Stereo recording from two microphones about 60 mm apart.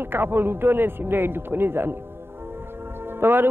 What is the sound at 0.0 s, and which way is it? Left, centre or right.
A man's voice, right.